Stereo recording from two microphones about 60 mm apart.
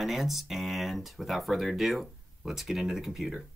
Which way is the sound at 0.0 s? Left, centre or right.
Centre.